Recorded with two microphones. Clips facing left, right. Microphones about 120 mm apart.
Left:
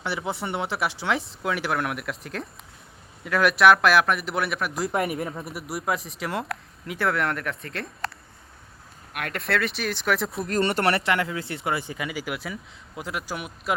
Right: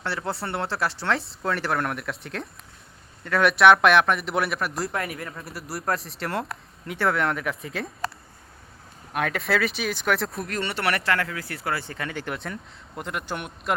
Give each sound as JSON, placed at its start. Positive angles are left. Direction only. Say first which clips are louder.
{"t": 0.0, "sound": "speech", "louder": "even", "side_deg": 0}
{"t": 4.9, "sound": "speech", "louder": "left 5 dB", "side_deg": 25}
{"t": 5.7, "sound": "speech", "louder": "even", "side_deg": 0}
{"t": 9.3, "sound": "speech", "louder": "left 2 dB", "side_deg": 0}
{"t": 10.4, "sound": "speech", "louder": "left 4 dB", "side_deg": 35}